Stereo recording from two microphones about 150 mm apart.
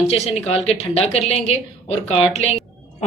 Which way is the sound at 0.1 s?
45° left (ahead or behind).